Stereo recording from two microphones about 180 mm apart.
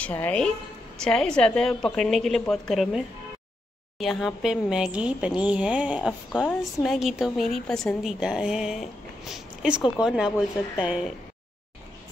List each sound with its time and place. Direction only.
0.0 s a woman's voice: 10° left (ahead or behind)
4.0 s a woman's voice: centre (ahead or behind)
6.3 s a woman's voice: 5° left (ahead or behind)